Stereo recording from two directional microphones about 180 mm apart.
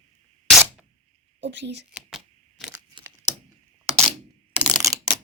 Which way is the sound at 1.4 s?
75° right (ahead or behind).